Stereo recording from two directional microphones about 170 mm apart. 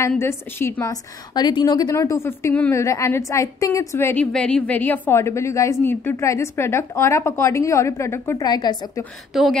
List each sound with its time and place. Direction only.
0.2 s a woman's voice: 15° left (ahead or behind)
9.3 s speech: centre (ahead or behind)